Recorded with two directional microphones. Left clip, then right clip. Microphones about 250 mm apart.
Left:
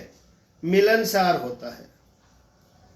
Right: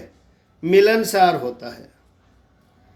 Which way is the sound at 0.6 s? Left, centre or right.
Right.